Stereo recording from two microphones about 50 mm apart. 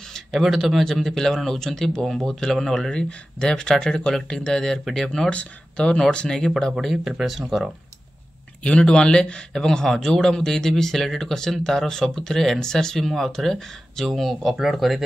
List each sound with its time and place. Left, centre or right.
0.3 s speech: centre
5.3 s speech: left
6.8 s speech: centre
8.6 s speech: centre